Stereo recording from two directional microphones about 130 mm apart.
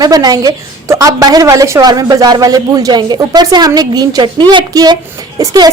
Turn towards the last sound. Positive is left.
turn(degrees=-30)  # may be behind; listen again after turning